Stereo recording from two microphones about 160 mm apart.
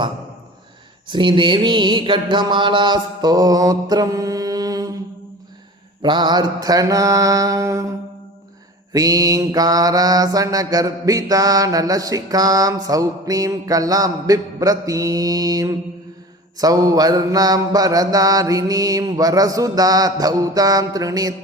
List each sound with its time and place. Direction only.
1.0 s mantra: 30° right (ahead or behind)
6.0 s mantra: 30° right (ahead or behind)
8.9 s mantra: 20° right (ahead or behind)